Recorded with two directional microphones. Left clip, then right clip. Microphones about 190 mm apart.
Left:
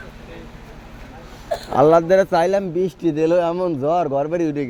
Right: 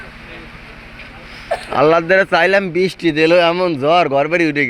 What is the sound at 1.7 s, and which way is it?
A man's voice, 20° left (ahead or behind).